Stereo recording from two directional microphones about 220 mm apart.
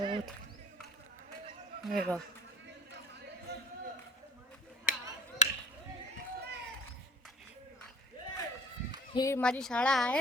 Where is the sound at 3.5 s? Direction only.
50° right (ahead or behind).